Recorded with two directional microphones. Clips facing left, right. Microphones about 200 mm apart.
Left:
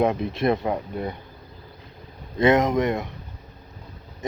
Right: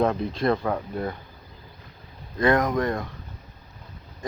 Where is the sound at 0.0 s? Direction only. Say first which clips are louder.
Left 1 dB; 20° left (ahead or behind).